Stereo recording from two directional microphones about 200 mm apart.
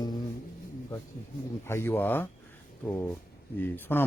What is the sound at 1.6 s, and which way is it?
Speech, 10° left (ahead or behind).